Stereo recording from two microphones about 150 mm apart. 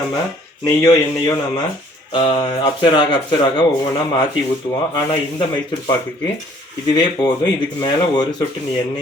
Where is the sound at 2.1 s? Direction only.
30° left (ahead or behind).